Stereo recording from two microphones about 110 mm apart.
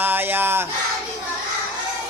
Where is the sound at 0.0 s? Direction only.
20° right (ahead or behind).